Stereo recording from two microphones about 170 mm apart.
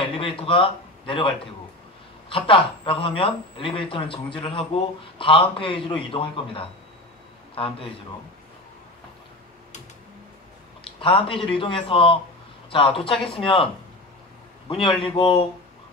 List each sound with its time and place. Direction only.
0.0 s a man's voice: 30° left (ahead or behind)
10.8 s a man's voice: 30° left (ahead or behind)
15.0 s a man's voice: 30° left (ahead or behind)